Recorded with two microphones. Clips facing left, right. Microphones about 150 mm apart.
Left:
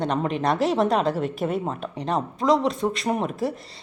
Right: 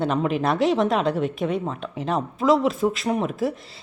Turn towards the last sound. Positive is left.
turn(degrees=0)  # may be behind; listen again after turning